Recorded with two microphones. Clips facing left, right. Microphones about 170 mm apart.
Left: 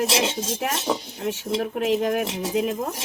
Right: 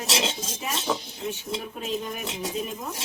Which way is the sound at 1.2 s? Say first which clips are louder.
Left 6 dB; 90° left.